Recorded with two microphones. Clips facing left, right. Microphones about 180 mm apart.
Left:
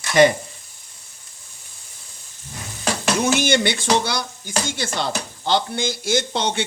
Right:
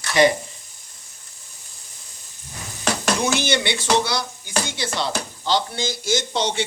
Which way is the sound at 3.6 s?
50° left (ahead or behind).